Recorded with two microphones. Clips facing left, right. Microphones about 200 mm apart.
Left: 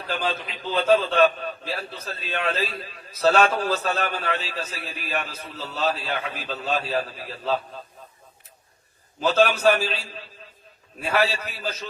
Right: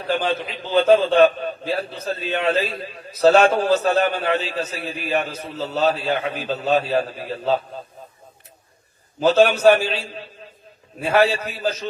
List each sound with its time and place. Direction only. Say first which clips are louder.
0.1 s a man's voice: right 6 dB; 30° right (ahead or behind)
9.2 s a man's voice: right 5 dB; 30° right (ahead or behind)